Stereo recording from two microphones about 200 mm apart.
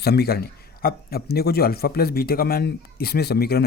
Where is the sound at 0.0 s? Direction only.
50° left (ahead or behind).